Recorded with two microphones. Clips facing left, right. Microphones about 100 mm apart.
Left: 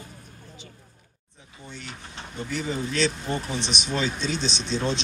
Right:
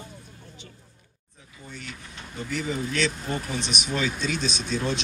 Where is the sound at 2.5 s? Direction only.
30° left (ahead or behind).